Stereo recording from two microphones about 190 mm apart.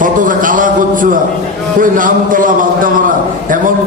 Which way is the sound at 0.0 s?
45° right (ahead or behind).